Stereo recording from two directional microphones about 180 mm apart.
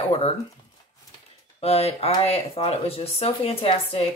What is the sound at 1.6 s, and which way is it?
Speech, 35° left (ahead or behind).